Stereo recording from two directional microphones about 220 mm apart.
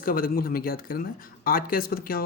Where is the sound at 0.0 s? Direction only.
40° left (ahead or behind).